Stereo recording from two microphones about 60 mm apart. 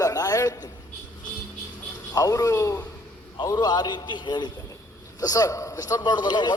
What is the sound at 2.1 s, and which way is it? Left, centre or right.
Speech, left.